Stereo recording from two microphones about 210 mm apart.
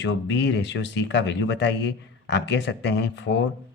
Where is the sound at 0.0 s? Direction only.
55° left (ahead or behind).